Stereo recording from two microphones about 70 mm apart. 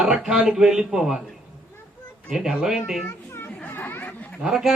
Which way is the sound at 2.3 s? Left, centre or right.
Centre.